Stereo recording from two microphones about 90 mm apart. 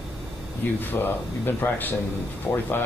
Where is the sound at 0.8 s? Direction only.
20° left (ahead or behind).